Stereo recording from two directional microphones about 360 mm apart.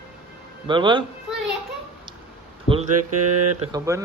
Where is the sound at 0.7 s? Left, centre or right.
Centre.